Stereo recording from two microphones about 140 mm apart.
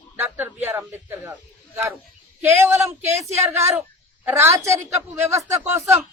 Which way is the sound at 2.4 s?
15° right (ahead or behind).